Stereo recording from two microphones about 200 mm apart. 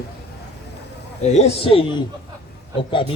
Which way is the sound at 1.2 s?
35° left (ahead or behind).